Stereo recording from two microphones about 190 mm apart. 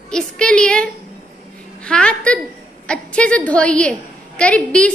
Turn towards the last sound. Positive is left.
turn(degrees=5)  # may be behind; listen again after turning